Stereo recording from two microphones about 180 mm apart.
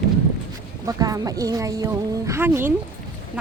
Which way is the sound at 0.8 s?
20° right (ahead or behind).